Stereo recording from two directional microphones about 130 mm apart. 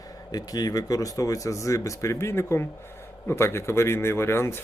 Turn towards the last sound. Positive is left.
turn(degrees=20)  # may be behind; listen again after turning